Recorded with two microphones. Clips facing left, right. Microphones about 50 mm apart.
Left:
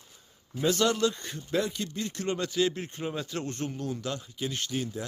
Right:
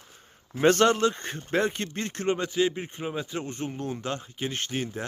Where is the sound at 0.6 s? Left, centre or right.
Right.